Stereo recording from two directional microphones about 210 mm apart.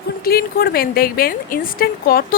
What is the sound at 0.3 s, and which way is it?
A woman's voice, 45° left (ahead or behind).